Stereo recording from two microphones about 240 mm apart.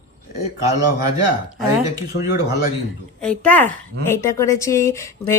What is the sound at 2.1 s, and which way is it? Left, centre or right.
Speech, left.